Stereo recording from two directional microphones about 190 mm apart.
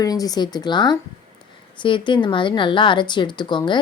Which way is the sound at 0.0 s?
20° left (ahead or behind).